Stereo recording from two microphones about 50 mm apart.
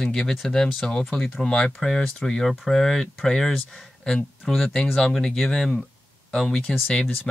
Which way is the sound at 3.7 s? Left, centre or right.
Centre.